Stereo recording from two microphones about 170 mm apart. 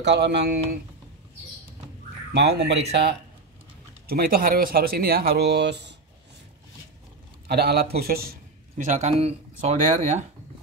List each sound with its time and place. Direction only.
0.0 s speech: 90° right
2.3 s speech: 75° right (ahead or behind)
4.1 s speech: 60° right (ahead or behind); by 5.9 s 90° right
7.4 s speech: 70° right (ahead or behind)
8.7 s speech: 45° right (ahead or behind)